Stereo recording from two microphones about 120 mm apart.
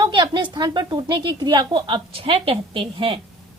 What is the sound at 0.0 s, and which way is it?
A woman's voice, 40° right (ahead or behind).